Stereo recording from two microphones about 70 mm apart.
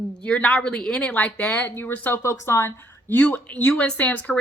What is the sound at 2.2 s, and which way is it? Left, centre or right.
A woman's voice, left.